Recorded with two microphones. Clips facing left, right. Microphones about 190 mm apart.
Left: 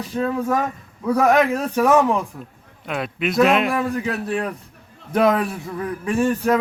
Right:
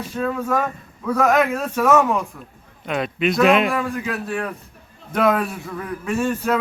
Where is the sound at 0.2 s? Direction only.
15° left (ahead or behind).